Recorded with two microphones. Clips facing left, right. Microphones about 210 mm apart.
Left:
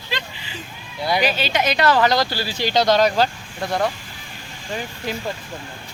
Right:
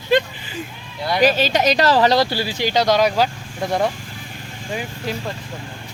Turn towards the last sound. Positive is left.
turn(degrees=0)  # may be behind; listen again after turning